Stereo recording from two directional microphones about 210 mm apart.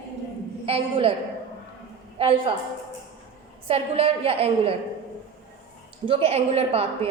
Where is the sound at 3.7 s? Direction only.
25° right (ahead or behind).